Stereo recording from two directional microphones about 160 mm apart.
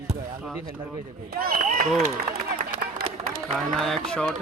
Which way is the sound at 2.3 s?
65° right (ahead or behind).